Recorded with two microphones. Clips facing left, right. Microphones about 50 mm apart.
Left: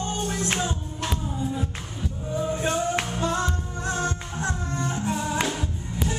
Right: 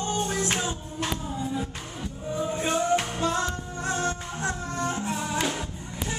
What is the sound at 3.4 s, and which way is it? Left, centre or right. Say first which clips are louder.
Music: left 1 dB; right.